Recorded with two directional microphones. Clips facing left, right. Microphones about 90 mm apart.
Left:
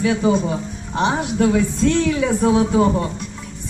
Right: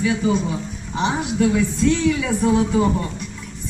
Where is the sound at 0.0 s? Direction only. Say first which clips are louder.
Left 2 dB; 45° left (ahead or behind).